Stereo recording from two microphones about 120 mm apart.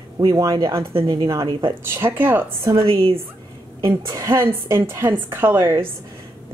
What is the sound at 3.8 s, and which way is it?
A woman's voice, 30° right (ahead or behind).